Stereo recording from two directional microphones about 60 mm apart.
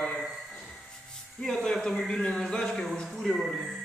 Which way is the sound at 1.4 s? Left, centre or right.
Centre.